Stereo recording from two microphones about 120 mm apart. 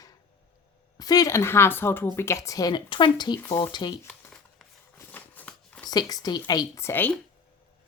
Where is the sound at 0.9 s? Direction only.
30° left (ahead or behind).